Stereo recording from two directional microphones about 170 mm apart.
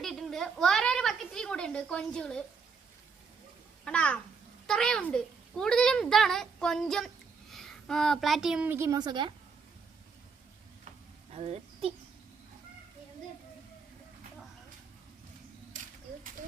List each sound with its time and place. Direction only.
0.0 s a woman's voice: centre (ahead or behind)
3.8 s a child's voice: 5° left (ahead or behind); by 9.3 s 25° right (ahead or behind)
11.3 s speech: 35° right (ahead or behind)